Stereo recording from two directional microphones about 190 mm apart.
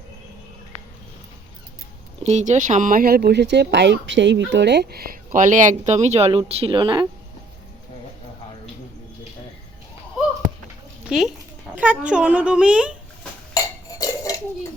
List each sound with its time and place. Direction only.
2.2 s speech: 40° right (ahead or behind)
11.7 s speech: 5° right (ahead or behind)
13.6 s a sound: 20° left (ahead or behind)
14.0 s cutlery: 20° left (ahead or behind)